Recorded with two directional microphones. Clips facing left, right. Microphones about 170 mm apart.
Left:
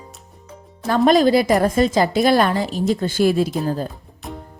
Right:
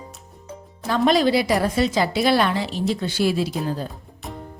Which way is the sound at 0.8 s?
50° left (ahead or behind).